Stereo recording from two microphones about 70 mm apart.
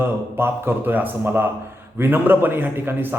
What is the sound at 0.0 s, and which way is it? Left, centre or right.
A man's voice, right.